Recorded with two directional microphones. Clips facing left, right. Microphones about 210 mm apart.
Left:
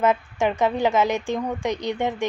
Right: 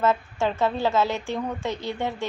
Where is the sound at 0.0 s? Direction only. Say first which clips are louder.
Left 2 dB; 15° left (ahead or behind).